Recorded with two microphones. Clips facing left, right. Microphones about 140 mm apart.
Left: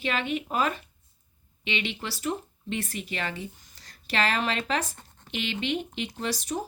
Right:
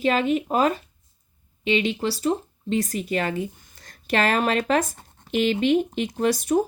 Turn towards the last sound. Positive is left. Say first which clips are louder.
# right 10 dB
turn(degrees=-50)  # may be behind; listen again after turning